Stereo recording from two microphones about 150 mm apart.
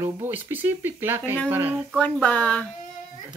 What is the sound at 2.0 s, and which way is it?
Speech, 10° left (ahead or behind).